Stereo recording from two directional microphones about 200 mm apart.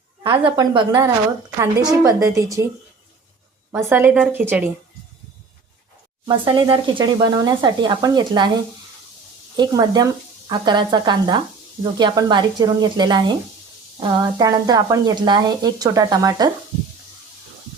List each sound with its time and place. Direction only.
0.2 s a woman's voice: 20° right (ahead or behind)
3.7 s a woman's voice: 10° right (ahead or behind)
6.2 s speech: 25° right (ahead or behind)
9.6 s speech: 20° right (ahead or behind)